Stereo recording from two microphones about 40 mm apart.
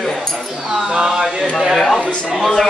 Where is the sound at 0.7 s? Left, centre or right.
Centre.